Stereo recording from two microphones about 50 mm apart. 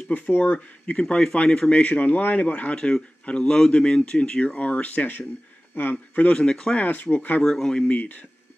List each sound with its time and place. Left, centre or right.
0.3 s speech: left
6.3 s speech: centre
6.8 s speech: left
7.4 s speech: centre
7.9 s speech: left